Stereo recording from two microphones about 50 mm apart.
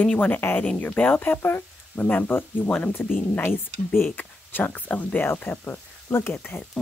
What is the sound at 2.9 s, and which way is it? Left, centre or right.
Speech, left.